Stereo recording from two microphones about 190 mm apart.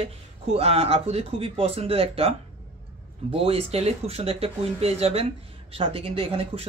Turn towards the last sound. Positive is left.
turn(degrees=-30)  # may be behind; listen again after turning